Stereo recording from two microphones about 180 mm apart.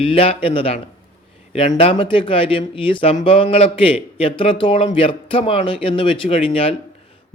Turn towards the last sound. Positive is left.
turn(degrees=30)  # may be behind; listen again after turning